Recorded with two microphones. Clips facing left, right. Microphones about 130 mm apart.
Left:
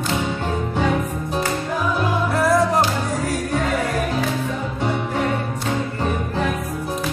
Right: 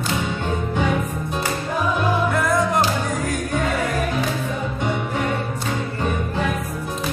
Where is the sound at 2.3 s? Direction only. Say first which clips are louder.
Left 2 dB; 35° left (ahead or behind).